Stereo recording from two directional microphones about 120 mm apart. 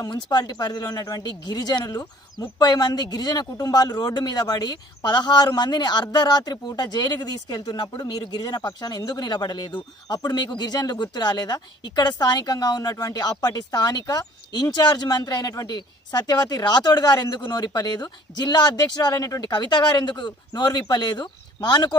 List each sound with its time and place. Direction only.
0.0 s speech: 35° left (ahead or behind)